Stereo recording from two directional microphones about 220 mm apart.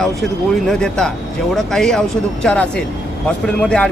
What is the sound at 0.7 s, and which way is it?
Speech, 5° left (ahead or behind).